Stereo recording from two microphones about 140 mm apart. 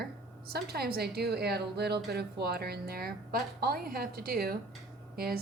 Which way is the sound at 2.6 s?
90° right.